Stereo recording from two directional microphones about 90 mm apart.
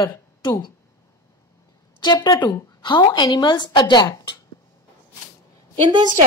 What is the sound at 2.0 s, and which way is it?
A woman's voice, 50° left (ahead or behind).